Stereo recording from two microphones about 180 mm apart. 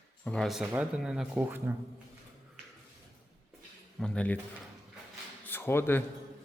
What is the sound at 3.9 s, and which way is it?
Speech, 5° left (ahead or behind).